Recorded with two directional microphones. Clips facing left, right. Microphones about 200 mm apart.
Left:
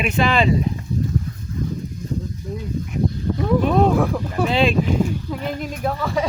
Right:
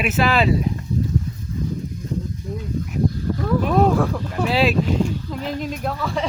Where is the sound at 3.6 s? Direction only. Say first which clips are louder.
Even; 5° right (ahead or behind).